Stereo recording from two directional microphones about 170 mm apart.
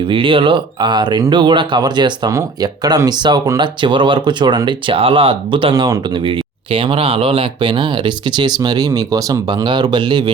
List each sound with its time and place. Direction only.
0.1 s speech: 30° right (ahead or behind)